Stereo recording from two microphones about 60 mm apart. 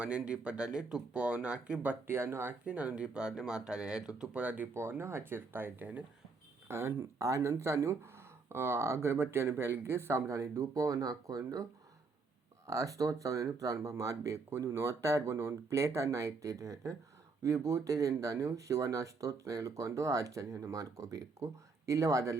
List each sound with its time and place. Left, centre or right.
0.0 s speech: centre
2.0 s speech: right
2.6 s speech: right
4.7 s speech: right
6.7 s speech: right
12.6 s speech: right